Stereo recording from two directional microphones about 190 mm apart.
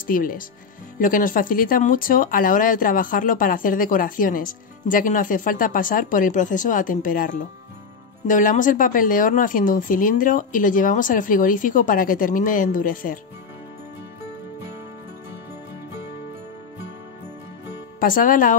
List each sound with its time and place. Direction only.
0.0 s speech: 45° left (ahead or behind)
18.0 s speech: 45° left (ahead or behind)